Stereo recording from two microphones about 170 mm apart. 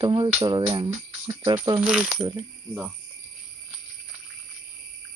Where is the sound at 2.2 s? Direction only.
30° right (ahead or behind).